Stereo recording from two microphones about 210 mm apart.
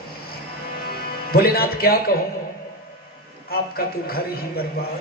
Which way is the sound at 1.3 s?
45° left (ahead or behind).